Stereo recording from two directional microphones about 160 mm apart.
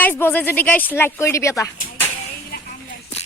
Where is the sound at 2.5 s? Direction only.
65° left (ahead or behind).